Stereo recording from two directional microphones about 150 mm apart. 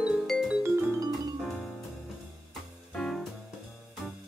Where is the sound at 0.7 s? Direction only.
15° right (ahead or behind).